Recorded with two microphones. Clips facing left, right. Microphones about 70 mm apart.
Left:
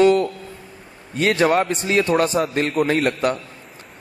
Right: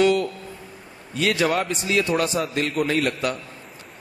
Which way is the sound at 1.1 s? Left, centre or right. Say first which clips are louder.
Left 4 dB; left.